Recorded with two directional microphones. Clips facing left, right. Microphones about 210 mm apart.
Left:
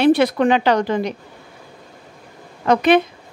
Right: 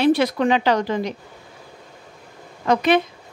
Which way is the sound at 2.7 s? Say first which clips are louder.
Left 3 dB; 60° left (ahead or behind).